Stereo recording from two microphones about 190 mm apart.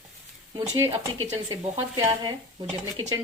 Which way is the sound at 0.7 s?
15° right (ahead or behind).